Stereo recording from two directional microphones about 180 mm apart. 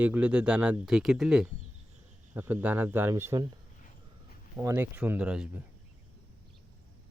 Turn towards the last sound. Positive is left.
turn(degrees=-5)  # may be behind; listen again after turning